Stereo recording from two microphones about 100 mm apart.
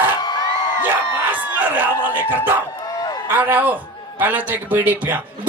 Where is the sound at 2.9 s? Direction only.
40° left (ahead or behind).